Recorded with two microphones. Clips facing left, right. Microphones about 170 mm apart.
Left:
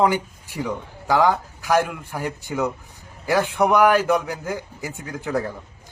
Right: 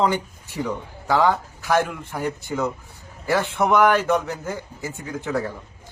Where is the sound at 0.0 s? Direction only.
10° left (ahead or behind).